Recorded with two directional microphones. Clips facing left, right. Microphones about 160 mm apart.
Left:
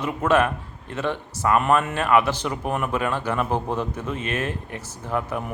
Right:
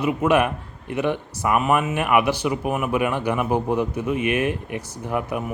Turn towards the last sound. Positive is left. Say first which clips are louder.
# right 1 dB
turn(degrees=-15)  # may be behind; listen again after turning